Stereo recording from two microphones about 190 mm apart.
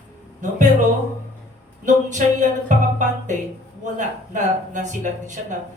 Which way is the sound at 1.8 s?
40° right (ahead or behind).